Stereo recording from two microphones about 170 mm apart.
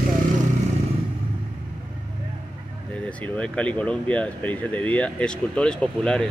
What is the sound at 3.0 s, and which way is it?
Speech, 10° left (ahead or behind).